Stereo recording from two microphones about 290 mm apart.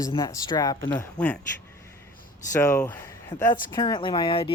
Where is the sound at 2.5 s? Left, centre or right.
Centre.